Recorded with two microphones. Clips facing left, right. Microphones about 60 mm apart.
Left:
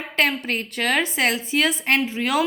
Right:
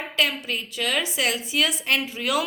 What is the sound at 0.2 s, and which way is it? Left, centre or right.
A woman's voice, left.